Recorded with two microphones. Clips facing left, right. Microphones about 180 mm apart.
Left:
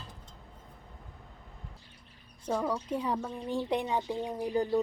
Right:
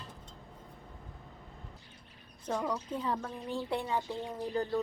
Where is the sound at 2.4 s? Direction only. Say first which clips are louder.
Left 3 dB; 10° left (ahead or behind).